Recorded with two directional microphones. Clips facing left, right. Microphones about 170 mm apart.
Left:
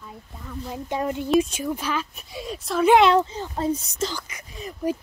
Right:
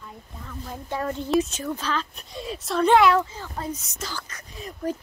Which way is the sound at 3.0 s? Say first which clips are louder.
Left 2 dB; 20° left (ahead or behind).